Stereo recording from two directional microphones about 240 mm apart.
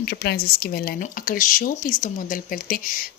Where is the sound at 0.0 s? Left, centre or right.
Left.